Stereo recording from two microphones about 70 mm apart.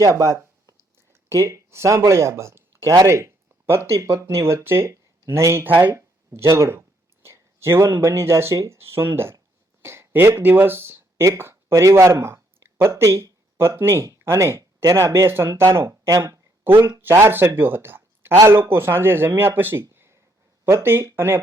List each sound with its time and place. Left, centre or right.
0.0 s a sound: right
1.1 s speech: right
5.6 s speech: right
6.4 s a sound: right
8.0 s speech: right
8.5 s speech: right
8.8 s speech: right
12.9 s speech: right
15.6 s speech: right
17.0 s speech: right